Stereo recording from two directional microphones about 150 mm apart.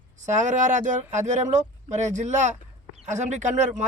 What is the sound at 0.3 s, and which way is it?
Speech, 55° right (ahead or behind).